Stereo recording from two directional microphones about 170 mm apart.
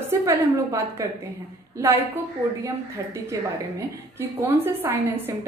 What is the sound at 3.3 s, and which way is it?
A woman's voice, 20° right (ahead or behind).